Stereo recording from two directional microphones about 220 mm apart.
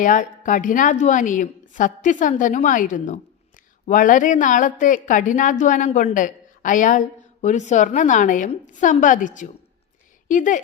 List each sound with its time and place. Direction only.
0.0 s a woman's voice: 35° left (ahead or behind)